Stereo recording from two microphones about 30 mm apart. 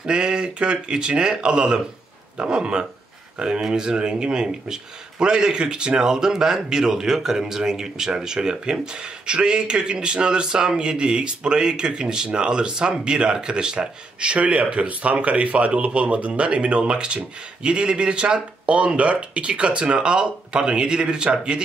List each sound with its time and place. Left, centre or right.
0.0 s speech: right
14.4 s speech: right